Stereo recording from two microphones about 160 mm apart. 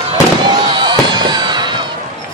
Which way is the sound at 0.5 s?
25° right (ahead or behind).